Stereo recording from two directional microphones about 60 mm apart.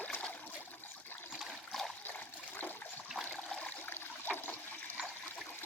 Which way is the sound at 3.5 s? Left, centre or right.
Centre.